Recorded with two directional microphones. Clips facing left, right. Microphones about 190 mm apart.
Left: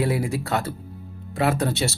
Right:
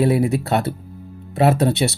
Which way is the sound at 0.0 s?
25° right (ahead or behind).